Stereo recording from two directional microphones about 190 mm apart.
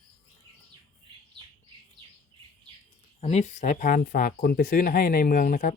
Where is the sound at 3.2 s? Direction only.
35° left (ahead or behind).